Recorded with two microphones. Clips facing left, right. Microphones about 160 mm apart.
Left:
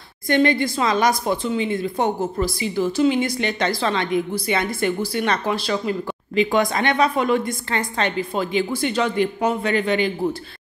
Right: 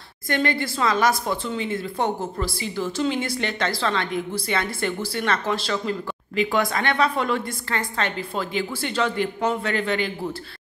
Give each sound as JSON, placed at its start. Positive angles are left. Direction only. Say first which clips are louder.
{"t": 0.3, "sound": "a woman's voice", "louder": "left 6 dB", "side_deg": 20}